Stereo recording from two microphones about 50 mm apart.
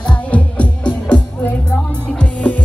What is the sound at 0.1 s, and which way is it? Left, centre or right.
Music, left.